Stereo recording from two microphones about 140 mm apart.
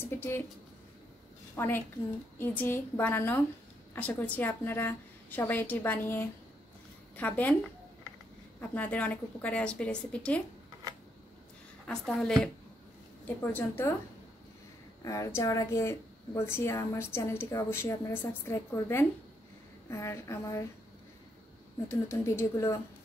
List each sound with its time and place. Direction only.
0.1 s a sound: 15° left (ahead or behind)
1.6 s a woman's voice: 15° left (ahead or behind)
8.5 s a woman's voice: 10° left (ahead or behind)
11.9 s a woman's voice: 5° left (ahead or behind)
15.0 s speech: 20° left (ahead or behind)
21.8 s speech: 20° left (ahead or behind)